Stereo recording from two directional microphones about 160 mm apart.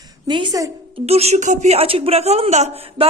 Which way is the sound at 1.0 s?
40° right (ahead or behind).